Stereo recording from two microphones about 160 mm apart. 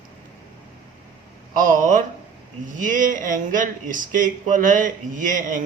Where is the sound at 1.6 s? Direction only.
55° right (ahead or behind).